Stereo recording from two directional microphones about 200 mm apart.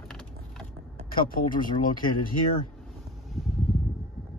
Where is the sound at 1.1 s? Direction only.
45° left (ahead or behind).